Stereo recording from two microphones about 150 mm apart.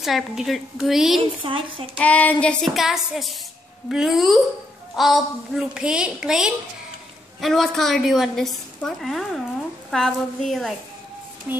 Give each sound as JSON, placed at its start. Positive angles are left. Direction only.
{"t": 0.0, "sound": "a woman's voice", "side_deg": 0}
{"t": 1.4, "sound": "speech", "side_deg": -35}
{"t": 2.0, "sound": "a woman's voice", "side_deg": 10}
{"t": 11.5, "sound": "speech", "side_deg": -10}